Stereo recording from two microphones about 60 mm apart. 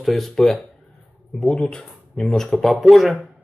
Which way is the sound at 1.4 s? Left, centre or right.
Centre.